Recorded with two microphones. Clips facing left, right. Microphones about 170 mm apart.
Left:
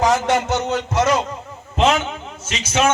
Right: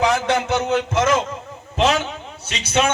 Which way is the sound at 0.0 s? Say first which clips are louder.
Left 1 dB; 60° right (ahead or behind).